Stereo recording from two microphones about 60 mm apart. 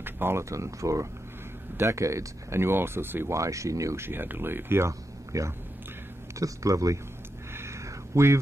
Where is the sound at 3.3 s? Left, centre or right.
Right.